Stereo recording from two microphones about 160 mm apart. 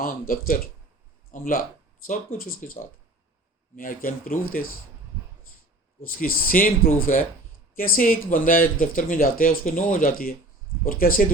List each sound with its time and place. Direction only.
0.0 s speech: 60° left (ahead or behind)
6.1 s speech: 60° left (ahead or behind)